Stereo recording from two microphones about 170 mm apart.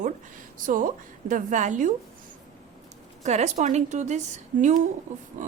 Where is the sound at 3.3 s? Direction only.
40° right (ahead or behind).